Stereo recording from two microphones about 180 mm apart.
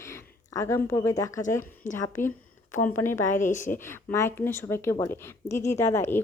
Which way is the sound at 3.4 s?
45° left (ahead or behind).